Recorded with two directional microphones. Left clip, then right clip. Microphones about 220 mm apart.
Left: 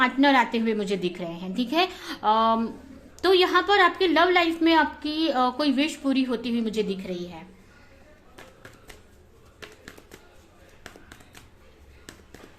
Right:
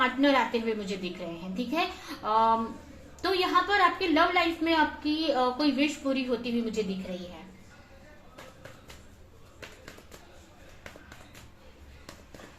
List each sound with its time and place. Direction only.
0.0 s a woman's voice: 50° left (ahead or behind)